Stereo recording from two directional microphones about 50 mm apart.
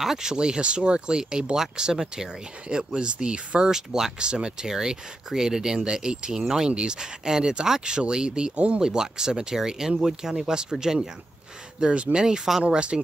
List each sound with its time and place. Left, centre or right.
0.0 s speech: centre